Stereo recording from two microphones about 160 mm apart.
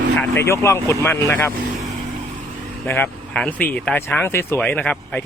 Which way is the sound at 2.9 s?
10° left (ahead or behind).